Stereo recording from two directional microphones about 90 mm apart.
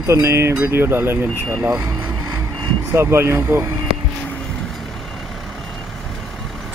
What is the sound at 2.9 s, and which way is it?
Speech, 30° right (ahead or behind).